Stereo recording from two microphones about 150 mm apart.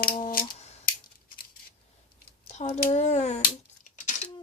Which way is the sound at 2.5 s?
50° left (ahead or behind).